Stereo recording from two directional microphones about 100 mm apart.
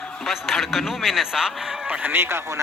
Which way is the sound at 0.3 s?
Centre (ahead or behind).